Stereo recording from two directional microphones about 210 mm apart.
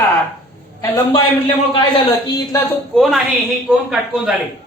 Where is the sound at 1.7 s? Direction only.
15° left (ahead or behind).